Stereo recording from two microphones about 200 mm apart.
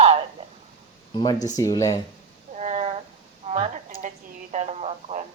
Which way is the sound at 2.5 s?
35° right (ahead or behind).